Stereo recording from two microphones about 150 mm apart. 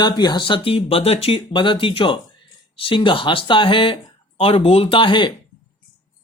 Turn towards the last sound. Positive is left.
turn(degrees=35)  # may be behind; listen again after turning